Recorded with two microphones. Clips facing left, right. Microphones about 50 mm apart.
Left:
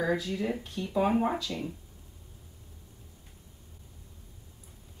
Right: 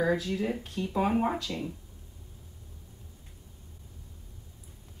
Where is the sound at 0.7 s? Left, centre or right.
Right.